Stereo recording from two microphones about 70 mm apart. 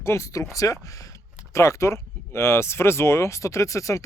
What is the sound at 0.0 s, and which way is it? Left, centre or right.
Speech, left.